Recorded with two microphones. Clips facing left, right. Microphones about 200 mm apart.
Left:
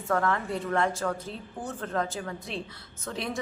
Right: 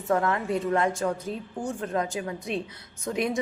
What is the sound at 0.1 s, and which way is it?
A woman's voice, 20° right (ahead or behind).